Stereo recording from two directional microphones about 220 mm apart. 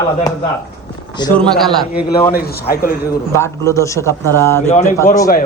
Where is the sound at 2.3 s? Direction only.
45° left (ahead or behind).